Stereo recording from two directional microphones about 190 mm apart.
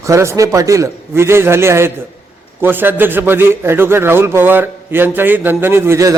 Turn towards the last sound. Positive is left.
turn(degrees=-15)  # may be behind; listen again after turning